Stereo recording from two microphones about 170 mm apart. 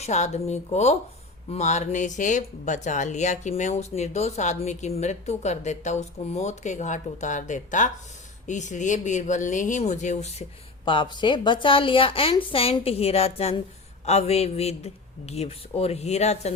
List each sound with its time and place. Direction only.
0.0 s a woman's voice: 40° left (ahead or behind)
10.8 s a woman's voice: 30° left (ahead or behind)